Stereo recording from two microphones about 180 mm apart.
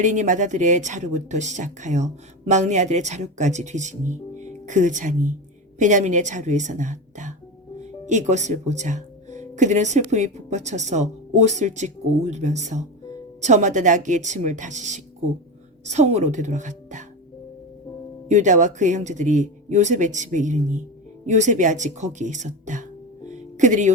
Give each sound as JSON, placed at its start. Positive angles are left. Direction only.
{"t": 0.0, "sound": "speech", "side_deg": -45}
{"t": 18.3, "sound": "speech", "side_deg": -40}